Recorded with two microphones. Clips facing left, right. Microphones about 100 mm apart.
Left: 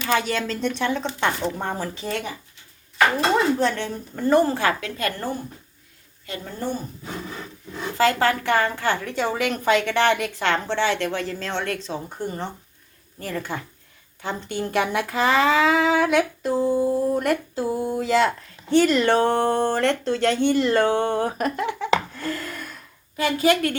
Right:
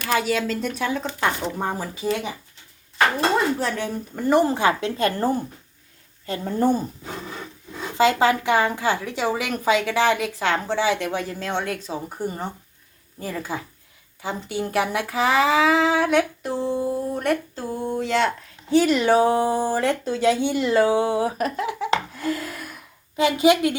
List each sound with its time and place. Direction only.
0.0 s a woman's voice: 5° right (ahead or behind)
3.3 s a woman's voice: centre (ahead or behind); by 6.7 s 40° right (ahead or behind)
7.9 s a woman's voice: 15° right (ahead or behind)
23.1 s a woman's voice: 15° right (ahead or behind)